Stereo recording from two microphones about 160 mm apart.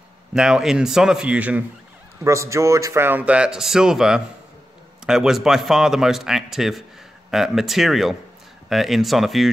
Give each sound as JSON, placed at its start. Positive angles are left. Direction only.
{"t": 0.3, "sound": "a man's voice", "side_deg": -5}
{"t": 2.2, "sound": "a man's voice", "side_deg": -20}